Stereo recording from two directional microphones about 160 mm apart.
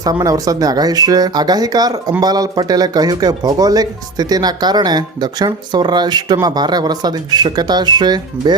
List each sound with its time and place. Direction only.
0.0 s speech: 25° right (ahead or behind)